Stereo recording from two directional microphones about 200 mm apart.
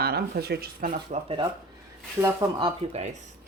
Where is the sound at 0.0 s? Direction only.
50° right (ahead or behind).